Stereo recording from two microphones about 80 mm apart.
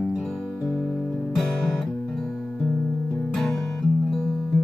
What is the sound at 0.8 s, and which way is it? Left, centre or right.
Guitar, centre.